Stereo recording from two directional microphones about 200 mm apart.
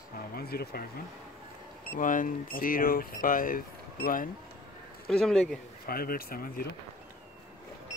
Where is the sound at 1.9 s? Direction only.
40° left (ahead or behind).